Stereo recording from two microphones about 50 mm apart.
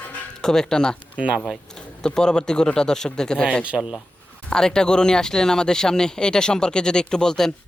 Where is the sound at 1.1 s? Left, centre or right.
Right.